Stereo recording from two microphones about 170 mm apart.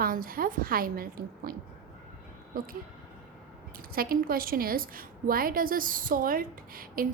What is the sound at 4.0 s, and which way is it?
A woman's voice, 60° right (ahead or behind).